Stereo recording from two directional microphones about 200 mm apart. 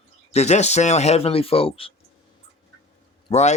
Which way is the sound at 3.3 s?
35° left (ahead or behind).